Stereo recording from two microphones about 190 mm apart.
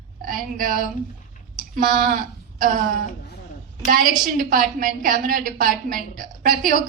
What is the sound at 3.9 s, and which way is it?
A woman's voice, 45° right (ahead or behind).